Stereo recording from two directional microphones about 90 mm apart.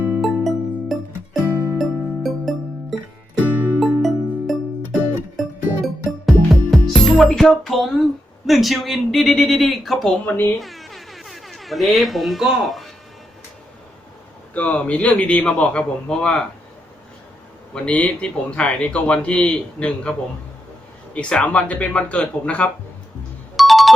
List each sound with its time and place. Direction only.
0.2 s music: centre (ahead or behind)
3.4 s music: 20° right (ahead or behind)
3.8 s music: centre (ahead or behind)
8.4 s speech: centre (ahead or behind)
10.2 s speech: 25° left (ahead or behind)
10.6 s music: centre (ahead or behind)
14.5 s a man's voice: 15° left (ahead or behind)
17.7 s a man's voice: 15° left (ahead or behind)
23.6 s music: centre (ahead or behind)